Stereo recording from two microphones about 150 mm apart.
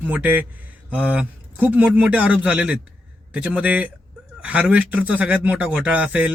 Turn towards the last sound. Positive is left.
turn(degrees=-10)  # may be behind; listen again after turning